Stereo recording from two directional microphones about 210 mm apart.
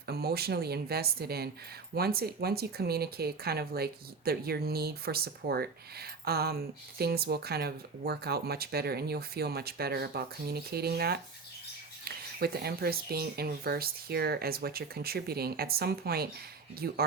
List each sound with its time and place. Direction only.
0.0 s speech: 50° right (ahead or behind)